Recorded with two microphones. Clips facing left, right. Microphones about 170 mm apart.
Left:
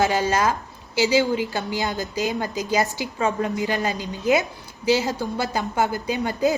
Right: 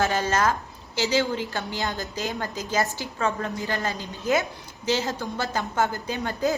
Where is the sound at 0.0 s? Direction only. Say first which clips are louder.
Left 3 dB; 10° left (ahead or behind).